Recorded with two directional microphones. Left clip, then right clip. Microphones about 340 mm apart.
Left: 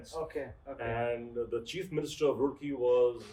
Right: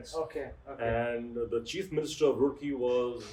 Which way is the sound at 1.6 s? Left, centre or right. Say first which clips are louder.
Right 3 dB; centre.